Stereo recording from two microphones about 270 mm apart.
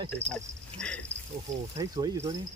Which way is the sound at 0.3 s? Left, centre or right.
Centre.